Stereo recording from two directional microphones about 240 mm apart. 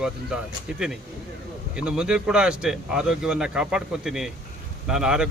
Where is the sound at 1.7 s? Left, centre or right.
Centre.